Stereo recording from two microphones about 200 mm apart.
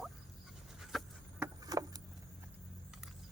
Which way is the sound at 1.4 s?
20° right (ahead or behind).